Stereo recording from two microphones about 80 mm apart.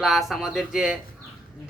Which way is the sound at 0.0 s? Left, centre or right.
Centre.